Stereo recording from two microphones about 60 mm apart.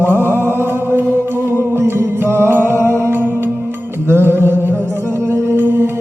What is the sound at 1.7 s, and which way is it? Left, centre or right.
Music, right.